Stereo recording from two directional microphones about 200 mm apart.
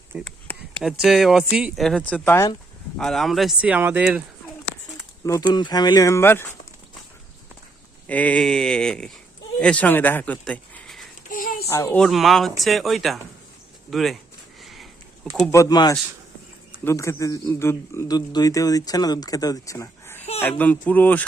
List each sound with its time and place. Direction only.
0.3 s speech: 5° left (ahead or behind)
3.0 s speech: centre (ahead or behind)
5.2 s a man's voice: 15° left (ahead or behind)
8.0 s speech: 5° left (ahead or behind)
11.3 s a sound: 45° left (ahead or behind)
11.7 s speech: 10° left (ahead or behind)
14.6 s a sound: centre (ahead or behind)
15.4 s a man's voice: 15° left (ahead or behind)